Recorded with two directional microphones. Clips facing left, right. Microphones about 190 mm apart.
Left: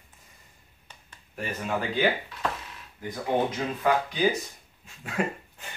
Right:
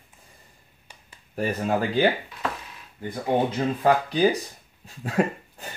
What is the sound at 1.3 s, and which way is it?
Speech, 35° right (ahead or behind).